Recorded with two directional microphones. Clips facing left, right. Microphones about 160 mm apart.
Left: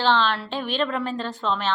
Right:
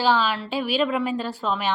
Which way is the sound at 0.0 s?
10° right (ahead or behind).